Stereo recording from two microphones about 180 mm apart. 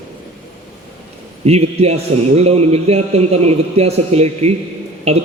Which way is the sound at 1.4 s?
35° right (ahead or behind).